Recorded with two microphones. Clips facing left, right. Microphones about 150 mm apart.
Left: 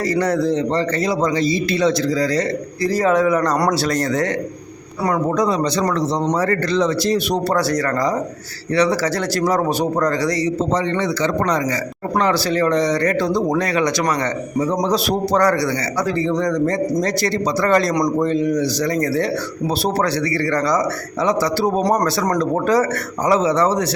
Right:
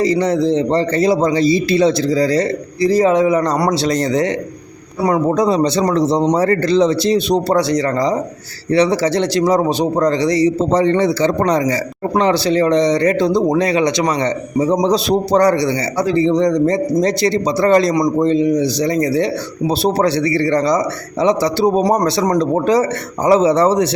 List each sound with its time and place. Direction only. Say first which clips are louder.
0.0 s a man's voice: right 4 dB; 20° right (ahead or behind)
3.5 s a man's voice: right 2 dB; 5° right (ahead or behind)
3.8 s a man's voice: right 3 dB; 20° right (ahead or behind)